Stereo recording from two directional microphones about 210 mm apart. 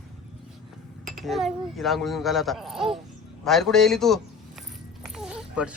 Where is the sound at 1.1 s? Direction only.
Centre (ahead or behind).